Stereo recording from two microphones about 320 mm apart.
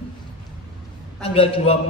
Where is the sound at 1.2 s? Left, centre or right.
Centre.